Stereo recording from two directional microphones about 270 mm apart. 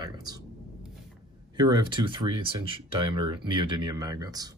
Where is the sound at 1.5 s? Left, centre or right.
Centre.